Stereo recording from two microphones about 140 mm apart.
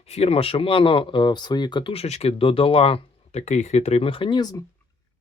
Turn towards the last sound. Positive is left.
turn(degrees=35)  # may be behind; listen again after turning